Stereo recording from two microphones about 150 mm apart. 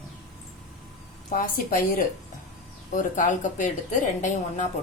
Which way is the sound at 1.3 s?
65° left (ahead or behind).